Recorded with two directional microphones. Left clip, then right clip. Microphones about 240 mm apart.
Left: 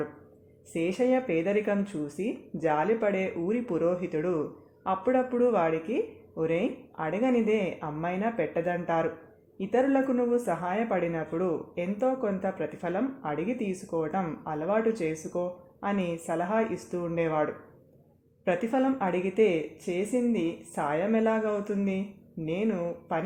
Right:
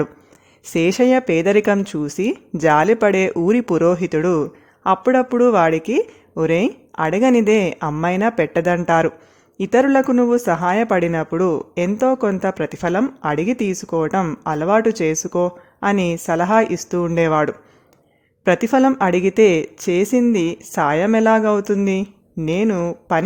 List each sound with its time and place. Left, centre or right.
0.6 s speech: right